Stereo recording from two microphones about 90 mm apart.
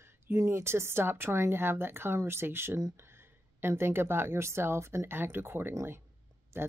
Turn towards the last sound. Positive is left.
turn(degrees=-25)  # may be behind; listen again after turning